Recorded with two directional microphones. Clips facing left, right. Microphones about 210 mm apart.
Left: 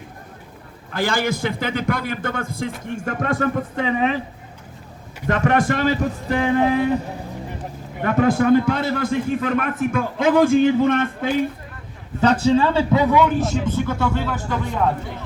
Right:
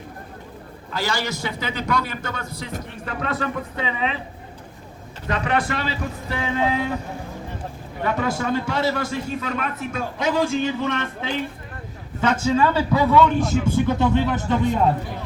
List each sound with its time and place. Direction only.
0.9 s a man's voice: 55° left (ahead or behind)
5.3 s a man's voice: 45° left (ahead or behind)
8.0 s a man's voice: 50° left (ahead or behind)
12.2 s speech: 35° left (ahead or behind); by 13.3 s 15° left (ahead or behind)
13.7 s speech: 15° right (ahead or behind)